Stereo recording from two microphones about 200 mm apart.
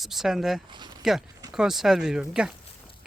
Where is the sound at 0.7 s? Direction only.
20° right (ahead or behind).